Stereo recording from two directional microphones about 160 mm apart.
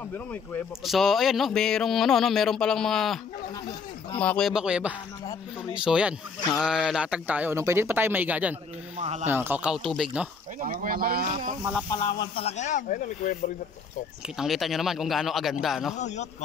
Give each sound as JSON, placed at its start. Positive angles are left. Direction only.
{"t": 0.8, "sound": "speech", "side_deg": 0}
{"t": 4.2, "sound": "speech", "side_deg": 5}
{"t": 8.9, "sound": "speech", "side_deg": -45}
{"t": 9.3, "sound": "speech", "side_deg": -10}
{"t": 10.6, "sound": "speech", "side_deg": -60}
{"t": 11.9, "sound": "speech", "side_deg": 25}
{"t": 12.4, "sound": "speech", "side_deg": 50}
{"t": 14.3, "sound": "speech", "side_deg": 0}
{"t": 16.0, "sound": "speech", "side_deg": 45}